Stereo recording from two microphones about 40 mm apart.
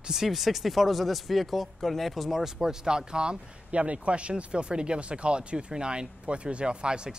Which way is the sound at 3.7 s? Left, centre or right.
Right.